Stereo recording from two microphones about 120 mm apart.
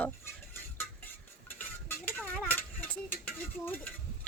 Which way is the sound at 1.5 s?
15° left (ahead or behind).